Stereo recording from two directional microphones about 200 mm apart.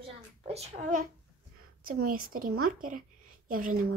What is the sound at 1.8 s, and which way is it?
Speech, 45° right (ahead or behind).